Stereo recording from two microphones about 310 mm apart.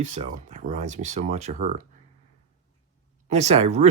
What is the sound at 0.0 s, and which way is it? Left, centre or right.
Speech, right.